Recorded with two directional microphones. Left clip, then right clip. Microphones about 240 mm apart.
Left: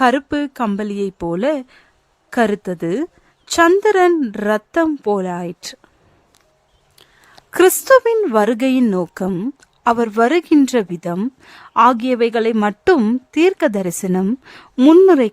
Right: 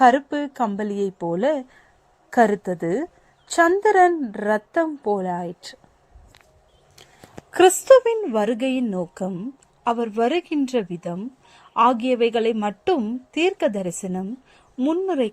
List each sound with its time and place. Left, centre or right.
0.0 s a woman's voice: left
6.9 s a sound: centre
7.5 s a woman's voice: left
10.8 s speech: left
11.0 s a woman's voice: left